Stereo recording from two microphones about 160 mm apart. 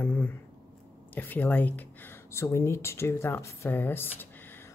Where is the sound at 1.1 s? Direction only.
10° left (ahead or behind).